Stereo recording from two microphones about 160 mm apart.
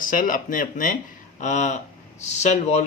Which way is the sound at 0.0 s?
55° left (ahead or behind).